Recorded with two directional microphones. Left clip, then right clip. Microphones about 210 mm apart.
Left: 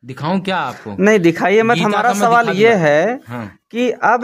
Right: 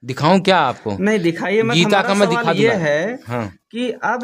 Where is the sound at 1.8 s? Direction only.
45° right (ahead or behind).